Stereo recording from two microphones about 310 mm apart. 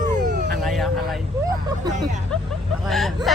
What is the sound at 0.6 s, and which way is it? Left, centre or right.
Vehicle, centre.